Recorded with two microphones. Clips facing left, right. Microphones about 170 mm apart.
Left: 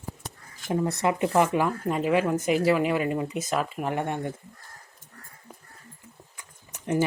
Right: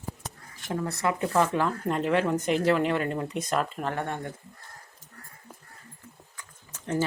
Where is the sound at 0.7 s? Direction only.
20° left (ahead or behind).